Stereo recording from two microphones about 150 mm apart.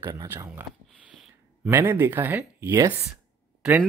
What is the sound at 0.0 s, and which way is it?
Speech, 25° right (ahead or behind).